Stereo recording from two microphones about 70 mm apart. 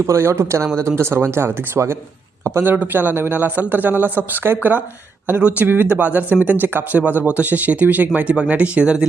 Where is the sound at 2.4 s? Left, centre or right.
Right.